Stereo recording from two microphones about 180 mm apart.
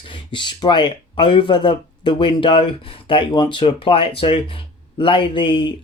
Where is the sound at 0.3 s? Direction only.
25° left (ahead or behind).